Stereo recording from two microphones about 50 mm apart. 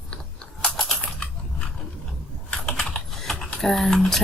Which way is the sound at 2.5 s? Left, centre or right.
Centre.